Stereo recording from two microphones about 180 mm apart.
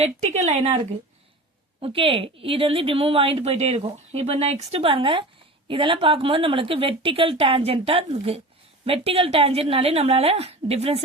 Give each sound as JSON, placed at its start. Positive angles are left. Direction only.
{"t": 0.0, "sound": "speech", "side_deg": -35}
{"t": 1.8, "sound": "a woman's voice", "side_deg": -30}